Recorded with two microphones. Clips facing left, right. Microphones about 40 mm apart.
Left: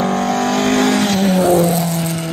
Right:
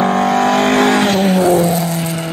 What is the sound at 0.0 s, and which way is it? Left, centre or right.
Vehicle, centre.